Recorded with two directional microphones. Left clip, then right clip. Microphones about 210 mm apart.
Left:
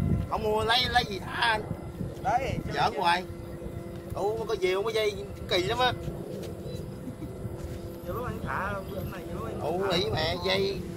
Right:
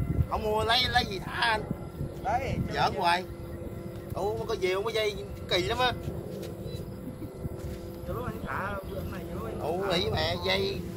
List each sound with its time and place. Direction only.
0.3 s speech: 15° right (ahead or behind)
2.2 s speech: 35° left (ahead or behind)
2.7 s speech: 20° right (ahead or behind)
8.1 s music: 40° left (ahead or behind)
9.8 s speech: 20° right (ahead or behind)